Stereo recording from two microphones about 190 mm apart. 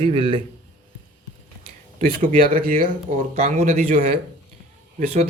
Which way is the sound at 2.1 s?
50° right (ahead or behind).